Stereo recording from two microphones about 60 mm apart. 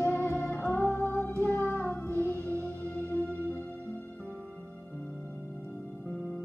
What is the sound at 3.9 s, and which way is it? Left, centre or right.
Music, left.